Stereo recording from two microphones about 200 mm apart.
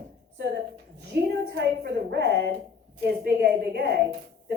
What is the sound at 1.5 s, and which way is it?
A woman's voice, 55° right (ahead or behind).